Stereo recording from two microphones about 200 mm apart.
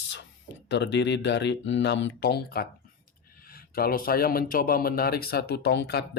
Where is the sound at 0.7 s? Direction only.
60° left (ahead or behind).